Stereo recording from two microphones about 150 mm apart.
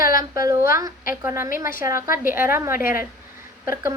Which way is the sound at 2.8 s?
70° left (ahead or behind).